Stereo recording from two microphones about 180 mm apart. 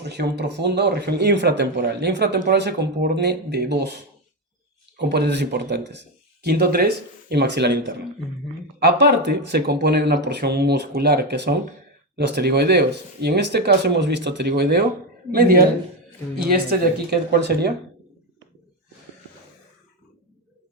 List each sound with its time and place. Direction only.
0.0 s speech: 70° right (ahead or behind)